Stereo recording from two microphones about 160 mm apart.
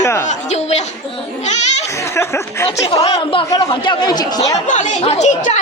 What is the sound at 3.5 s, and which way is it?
Speech, 25° left (ahead or behind).